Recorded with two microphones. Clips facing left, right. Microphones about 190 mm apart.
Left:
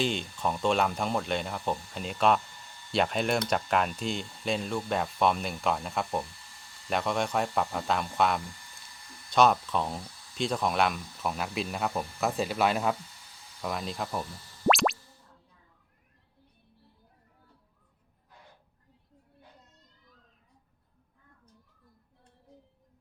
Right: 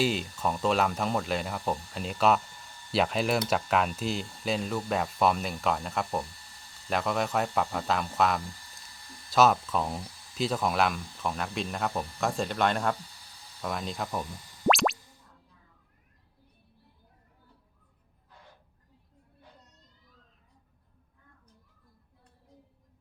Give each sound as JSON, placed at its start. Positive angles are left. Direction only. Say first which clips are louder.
{"t": 0.0, "sound": "speech", "louder": "right 2 dB", "side_deg": -5}
{"t": 14.7, "sound": "music", "louder": "even", "side_deg": 0}